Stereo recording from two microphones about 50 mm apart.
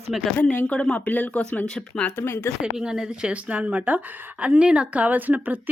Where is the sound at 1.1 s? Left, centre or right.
Left.